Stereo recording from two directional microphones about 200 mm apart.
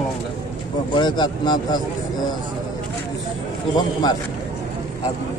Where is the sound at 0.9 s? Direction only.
20° left (ahead or behind).